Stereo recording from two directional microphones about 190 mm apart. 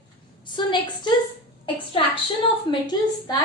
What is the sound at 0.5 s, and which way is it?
Speech, 25° left (ahead or behind).